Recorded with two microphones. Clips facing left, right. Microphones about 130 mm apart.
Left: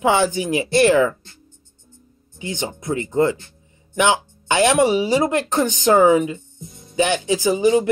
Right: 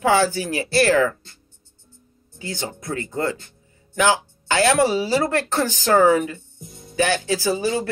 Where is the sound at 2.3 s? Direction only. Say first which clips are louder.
Left 3 dB; 20° left (ahead or behind).